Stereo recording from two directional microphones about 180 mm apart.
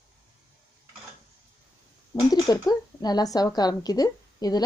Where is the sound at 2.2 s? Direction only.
20° left (ahead or behind).